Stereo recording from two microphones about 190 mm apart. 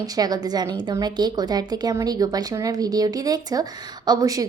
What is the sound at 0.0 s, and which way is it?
A woman's voice, 20° right (ahead or behind).